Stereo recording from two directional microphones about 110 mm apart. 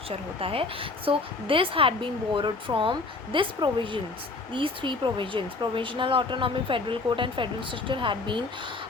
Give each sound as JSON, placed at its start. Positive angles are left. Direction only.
{"t": 0.3, "sound": "speech", "side_deg": -60}